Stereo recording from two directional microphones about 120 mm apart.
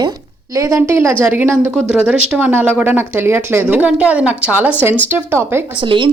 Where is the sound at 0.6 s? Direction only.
25° right (ahead or behind).